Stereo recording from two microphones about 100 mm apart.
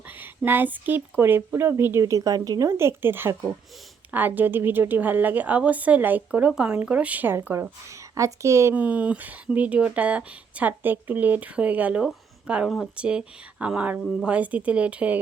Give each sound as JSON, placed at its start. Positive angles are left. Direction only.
{"t": 0.1, "sound": "a woman's voice", "side_deg": -20}
{"t": 8.7, "sound": "speech", "side_deg": -15}